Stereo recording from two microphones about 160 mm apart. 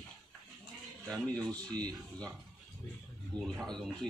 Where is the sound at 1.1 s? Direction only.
10° left (ahead or behind).